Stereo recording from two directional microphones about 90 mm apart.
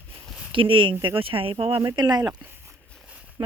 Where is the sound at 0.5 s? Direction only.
70° right (ahead or behind).